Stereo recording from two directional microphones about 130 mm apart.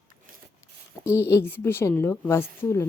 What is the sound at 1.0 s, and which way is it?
A woman's voice, 20° left (ahead or behind).